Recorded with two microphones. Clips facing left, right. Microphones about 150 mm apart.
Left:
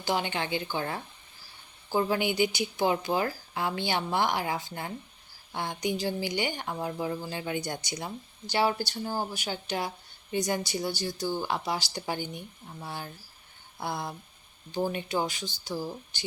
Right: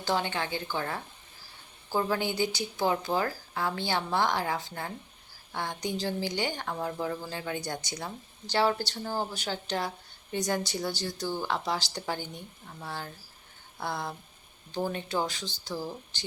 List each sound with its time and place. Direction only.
0.0 s a woman's voice: 15° left (ahead or behind)